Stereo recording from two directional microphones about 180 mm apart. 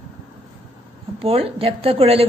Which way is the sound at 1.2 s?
30° right (ahead or behind).